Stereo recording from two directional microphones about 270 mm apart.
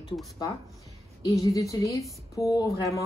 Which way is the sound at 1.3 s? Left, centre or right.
Centre.